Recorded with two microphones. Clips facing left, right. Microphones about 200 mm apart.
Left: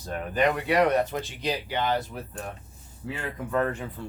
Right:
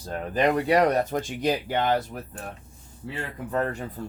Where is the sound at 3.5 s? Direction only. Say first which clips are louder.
Left 1 dB; 35° right (ahead or behind).